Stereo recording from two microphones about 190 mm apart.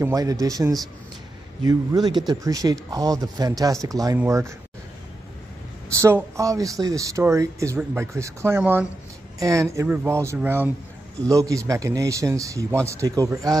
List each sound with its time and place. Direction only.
0.0 s speech: 20° right (ahead or behind)
5.9 s speech: 15° right (ahead or behind)